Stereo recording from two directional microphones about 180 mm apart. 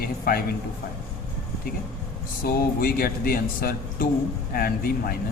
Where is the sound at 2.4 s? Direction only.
55° left (ahead or behind).